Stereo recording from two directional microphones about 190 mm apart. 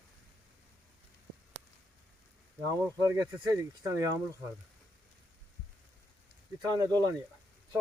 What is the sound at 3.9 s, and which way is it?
Speech, 15° right (ahead or behind).